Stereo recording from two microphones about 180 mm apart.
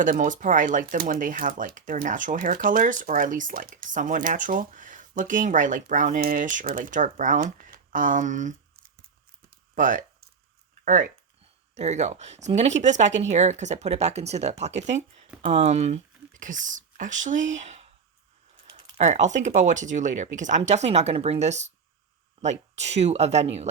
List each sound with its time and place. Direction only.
0.0 s speech: 45° right (ahead or behind)
8.7 s scissors: 60° right (ahead or behind)
9.7 s a sound: 50° right (ahead or behind)
10.8 s speech: 45° right (ahead or behind)